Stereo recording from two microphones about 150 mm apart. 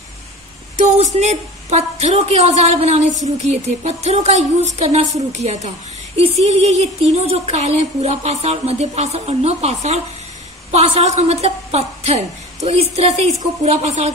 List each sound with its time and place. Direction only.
0.7 s a woman's voice: 50° right (ahead or behind)